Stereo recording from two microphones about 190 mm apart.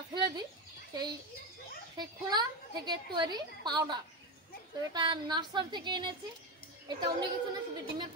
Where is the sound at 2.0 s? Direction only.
25° right (ahead or behind).